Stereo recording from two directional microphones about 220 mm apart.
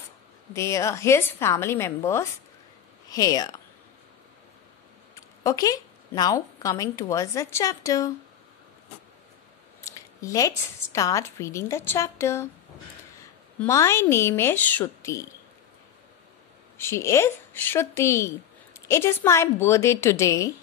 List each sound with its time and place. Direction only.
0.5 s speech: 10° left (ahead or behind)
5.1 s a woman's voice: 15° left (ahead or behind)
9.8 s a woman's voice: 15° left (ahead or behind)
16.7 s speech: 10° left (ahead or behind)